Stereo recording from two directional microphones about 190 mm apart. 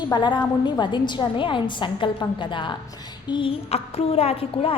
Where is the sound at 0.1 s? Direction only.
25° left (ahead or behind).